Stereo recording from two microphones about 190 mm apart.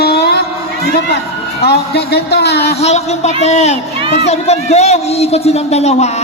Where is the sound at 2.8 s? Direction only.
35° left (ahead or behind).